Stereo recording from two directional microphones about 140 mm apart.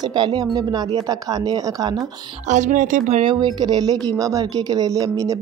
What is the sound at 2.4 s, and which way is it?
Speech, 60° right (ahead or behind).